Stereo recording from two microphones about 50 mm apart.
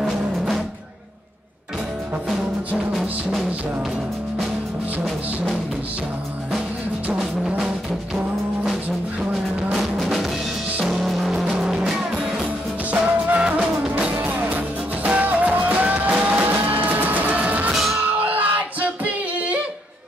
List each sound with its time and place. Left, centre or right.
2.9 s music: centre
7.2 s music: centre
9.3 s music: centre
11.3 s music: centre
12.9 s music: right